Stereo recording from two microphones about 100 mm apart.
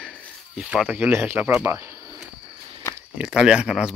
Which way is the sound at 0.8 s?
15° right (ahead or behind).